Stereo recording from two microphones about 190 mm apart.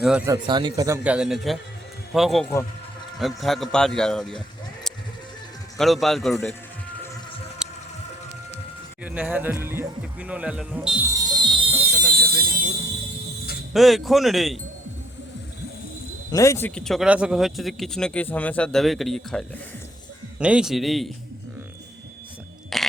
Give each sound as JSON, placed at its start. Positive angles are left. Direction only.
{"t": 0.0, "sound": "speech", "side_deg": -5}
{"t": 0.3, "sound": "speech", "side_deg": -25}
{"t": 1.0, "sound": "a man's voice", "side_deg": -5}
{"t": 7.6, "sound": "a sound", "side_deg": -5}
{"t": 9.0, "sound": "speech", "side_deg": -10}
{"t": 11.1, "sound": "music", "side_deg": -20}
{"t": 12.1, "sound": "a sound", "side_deg": -55}
{"t": 13.7, "sound": "speech", "side_deg": 0}
{"t": 16.3, "sound": "speech", "side_deg": 15}
{"t": 22.7, "sound": "a sound", "side_deg": 0}